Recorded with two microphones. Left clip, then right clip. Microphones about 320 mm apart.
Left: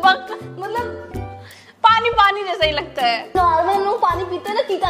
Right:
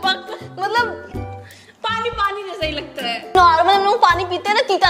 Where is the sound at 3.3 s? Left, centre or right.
Right.